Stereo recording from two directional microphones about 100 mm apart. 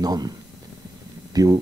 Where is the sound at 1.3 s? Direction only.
35° right (ahead or behind).